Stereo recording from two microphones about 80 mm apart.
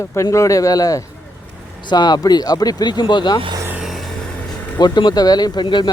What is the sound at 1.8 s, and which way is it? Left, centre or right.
Speech, left.